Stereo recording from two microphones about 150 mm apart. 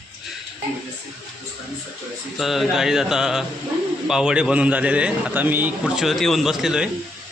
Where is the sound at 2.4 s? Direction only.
Centre (ahead or behind).